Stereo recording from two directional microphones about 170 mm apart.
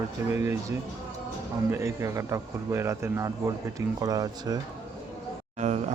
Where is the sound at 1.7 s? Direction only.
15° right (ahead or behind).